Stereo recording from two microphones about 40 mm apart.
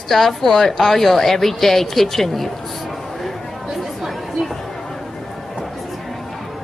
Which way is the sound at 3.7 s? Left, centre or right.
Centre.